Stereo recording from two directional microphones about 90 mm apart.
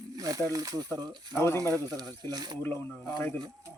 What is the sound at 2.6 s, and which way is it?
Speech, 25° left (ahead or behind).